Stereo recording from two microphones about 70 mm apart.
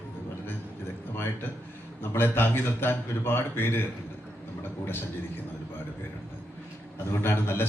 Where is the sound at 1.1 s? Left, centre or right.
Left.